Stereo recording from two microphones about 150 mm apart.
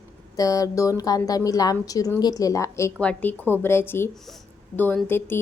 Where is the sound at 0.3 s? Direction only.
25° left (ahead or behind).